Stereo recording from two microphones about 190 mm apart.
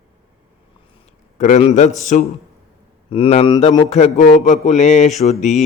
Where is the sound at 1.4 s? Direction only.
35° left (ahead or behind).